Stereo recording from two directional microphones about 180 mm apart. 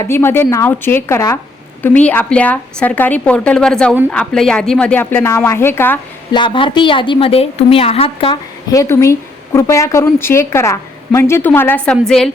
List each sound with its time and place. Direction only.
0.0 s a woman's voice: 15° left (ahead or behind)
6.3 s a woman's voice: 25° left (ahead or behind)
8.7 s a woman's voice: 15° left (ahead or behind)